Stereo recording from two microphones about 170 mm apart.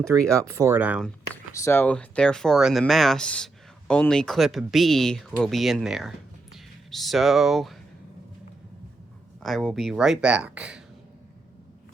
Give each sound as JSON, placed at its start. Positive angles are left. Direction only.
{"t": 0.0, "sound": "speech", "side_deg": -15}
{"t": 1.5, "sound": "speech", "side_deg": 15}
{"t": 9.4, "sound": "speech", "side_deg": 0}